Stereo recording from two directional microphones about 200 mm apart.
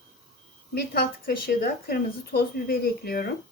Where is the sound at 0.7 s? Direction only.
50° left (ahead or behind).